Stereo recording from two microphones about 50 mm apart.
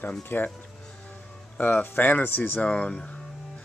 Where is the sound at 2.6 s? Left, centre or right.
Left.